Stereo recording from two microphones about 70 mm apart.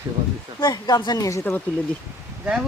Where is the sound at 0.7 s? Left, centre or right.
Left.